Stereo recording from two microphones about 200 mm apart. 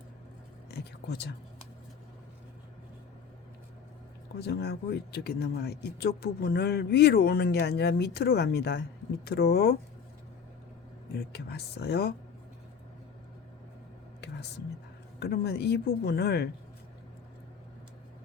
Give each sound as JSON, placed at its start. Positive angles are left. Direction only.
{"t": 0.7, "sound": "speech", "side_deg": 55}
{"t": 4.4, "sound": "speech", "side_deg": 55}
{"t": 11.3, "sound": "speech", "side_deg": 55}
{"t": 15.2, "sound": "speech", "side_deg": 55}